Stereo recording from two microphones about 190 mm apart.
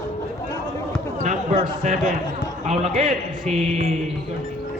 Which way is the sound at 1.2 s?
40° right (ahead or behind).